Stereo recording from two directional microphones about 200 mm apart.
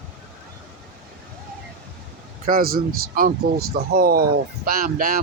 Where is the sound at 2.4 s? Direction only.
45° right (ahead or behind).